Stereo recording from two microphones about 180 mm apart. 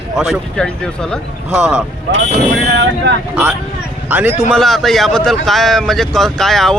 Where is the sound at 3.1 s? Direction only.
65° right (ahead or behind).